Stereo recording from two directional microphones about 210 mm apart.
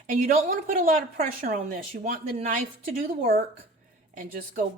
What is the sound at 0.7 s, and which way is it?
Speech, 40° right (ahead or behind).